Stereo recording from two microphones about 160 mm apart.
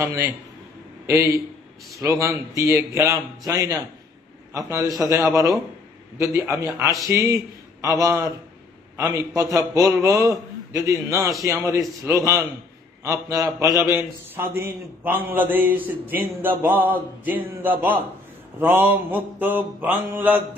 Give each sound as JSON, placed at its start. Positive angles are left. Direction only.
{"t": 1.0, "sound": "a man's voice", "side_deg": -15}